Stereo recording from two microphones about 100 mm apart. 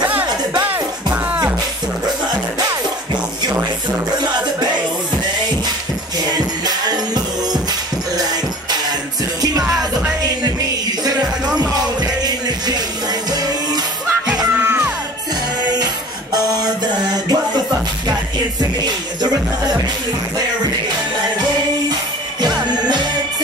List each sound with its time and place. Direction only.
1.1 s music: 15° right (ahead or behind)
9.4 s music: 35° right (ahead or behind)
12.0 s music: 40° right (ahead or behind)
14.5 s music: 25° right (ahead or behind)
16.3 s music: 40° right (ahead or behind)
22.4 s music: 45° right (ahead or behind)